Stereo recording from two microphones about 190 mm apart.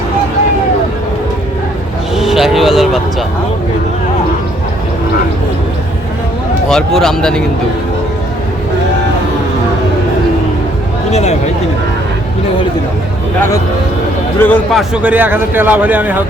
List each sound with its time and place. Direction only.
2.1 s vehicle: centre (ahead or behind)
6.7 s speech: 5° left (ahead or behind)
11.1 s speech: 35° left (ahead or behind)
14.3 s a man's voice: 10° left (ahead or behind); by 16.2 s 10° right (ahead or behind)